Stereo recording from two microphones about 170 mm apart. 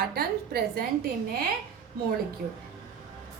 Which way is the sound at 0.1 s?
65° right (ahead or behind).